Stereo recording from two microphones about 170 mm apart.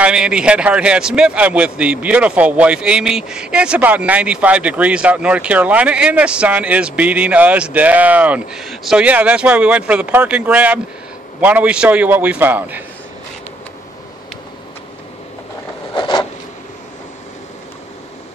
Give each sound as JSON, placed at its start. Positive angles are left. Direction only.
{"t": 0.0, "sound": "a man's voice", "side_deg": -5}
{"t": 15.9, "sound": "zipper", "side_deg": 25}